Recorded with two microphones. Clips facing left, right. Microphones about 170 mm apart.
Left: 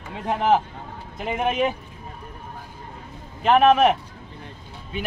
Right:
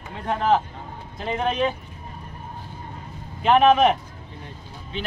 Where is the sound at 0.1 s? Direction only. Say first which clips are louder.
Left 1 dB; 15° left (ahead or behind).